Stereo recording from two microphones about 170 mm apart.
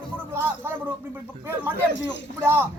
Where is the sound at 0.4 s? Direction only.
15° right (ahead or behind).